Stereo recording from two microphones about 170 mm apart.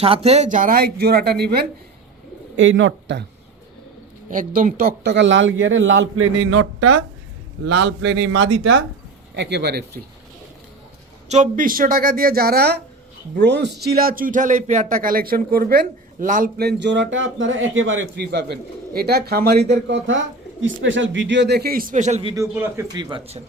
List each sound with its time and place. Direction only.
0.0 s speech: 35° right (ahead or behind); by 1.6 s 65° right (ahead or behind)
2.6 s a man's voice: 90° right
4.3 s speech: 50° right (ahead or behind); by 5.9 s 90° right
7.7 s a man's voice: 90° right; by 10.0 s 70° right (ahead or behind)
11.3 s speech: 50° right (ahead or behind); by 12.8 s 70° right (ahead or behind)
13.4 s speech: 90° right
18.9 s speech: 70° right (ahead or behind); by 22.3 s 40° right (ahead or behind)
22.3 s a man's voice: 15° right (ahead or behind)